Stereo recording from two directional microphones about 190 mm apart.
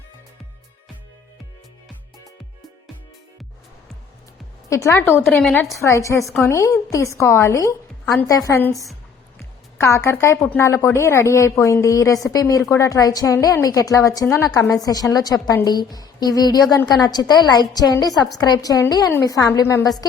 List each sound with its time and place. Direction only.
4.7 s a woman's voice: 15° left (ahead or behind)
5.7 s a woman's voice: 15° left (ahead or behind)